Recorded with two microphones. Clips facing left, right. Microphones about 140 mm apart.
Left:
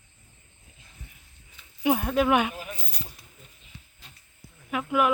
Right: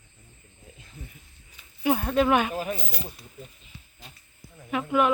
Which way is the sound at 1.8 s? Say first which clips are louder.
Even; 15° left (ahead or behind).